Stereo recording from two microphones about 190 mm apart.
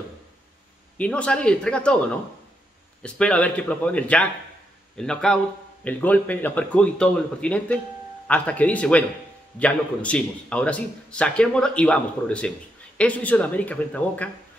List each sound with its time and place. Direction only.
0.9 s a man's voice: 5° left (ahead or behind)
3.0 s a man's voice: 5° left (ahead or behind)